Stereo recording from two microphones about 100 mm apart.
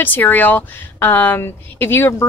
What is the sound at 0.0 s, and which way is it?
A woman's voice, 20° left (ahead or behind).